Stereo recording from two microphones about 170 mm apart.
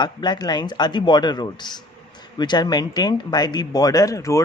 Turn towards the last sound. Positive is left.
turn(degrees=20)  # may be behind; listen again after turning